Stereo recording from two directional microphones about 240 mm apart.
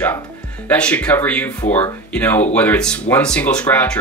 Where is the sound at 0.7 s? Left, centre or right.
Centre.